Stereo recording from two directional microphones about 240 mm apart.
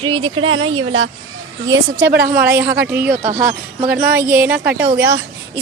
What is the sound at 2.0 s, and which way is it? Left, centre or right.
A woman's voice, right.